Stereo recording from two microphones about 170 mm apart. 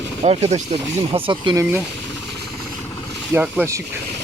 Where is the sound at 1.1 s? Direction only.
30° right (ahead or behind).